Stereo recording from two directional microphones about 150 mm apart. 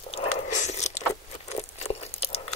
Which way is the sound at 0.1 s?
50° left (ahead or behind).